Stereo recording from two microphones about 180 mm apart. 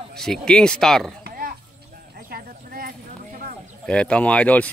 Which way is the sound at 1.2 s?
50° right (ahead or behind).